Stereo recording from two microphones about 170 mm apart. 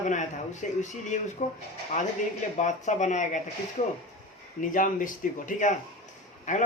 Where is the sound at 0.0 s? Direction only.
45° left (ahead or behind).